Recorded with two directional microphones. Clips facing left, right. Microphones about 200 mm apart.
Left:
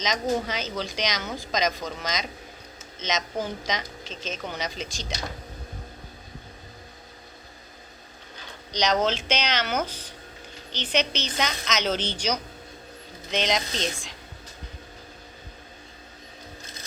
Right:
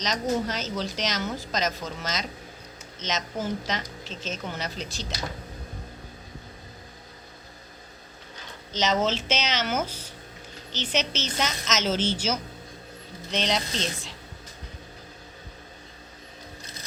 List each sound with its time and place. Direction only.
0.0 s a woman's voice: centre (ahead or behind)
8.7 s a woman's voice: 5° right (ahead or behind)